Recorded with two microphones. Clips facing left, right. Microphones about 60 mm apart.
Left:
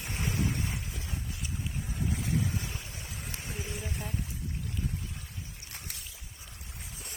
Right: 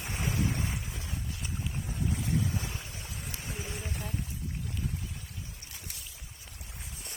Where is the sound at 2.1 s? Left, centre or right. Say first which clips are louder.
Even; centre.